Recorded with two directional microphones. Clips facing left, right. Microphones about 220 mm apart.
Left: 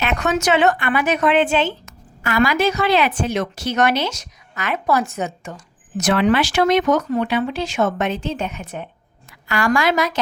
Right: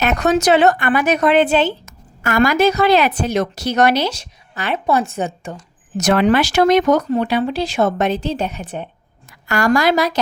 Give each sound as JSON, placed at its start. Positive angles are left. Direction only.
{"t": 0.0, "sound": "a woman's voice", "side_deg": -40}
{"t": 6.0, "sound": "a woman's voice", "side_deg": -40}
{"t": 9.5, "sound": "a woman's voice", "side_deg": -40}